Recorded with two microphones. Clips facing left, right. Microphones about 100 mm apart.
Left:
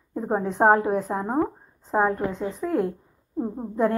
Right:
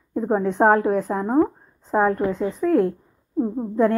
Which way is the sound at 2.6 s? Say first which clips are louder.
Right 6 dB; 30° left (ahead or behind).